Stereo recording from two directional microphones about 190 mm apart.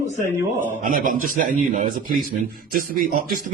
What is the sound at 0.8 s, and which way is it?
Speech, 45° right (ahead or behind).